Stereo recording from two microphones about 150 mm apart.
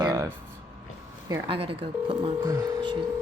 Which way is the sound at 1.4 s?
35° right (ahead or behind).